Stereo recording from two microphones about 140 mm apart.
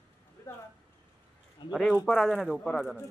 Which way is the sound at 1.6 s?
35° left (ahead or behind).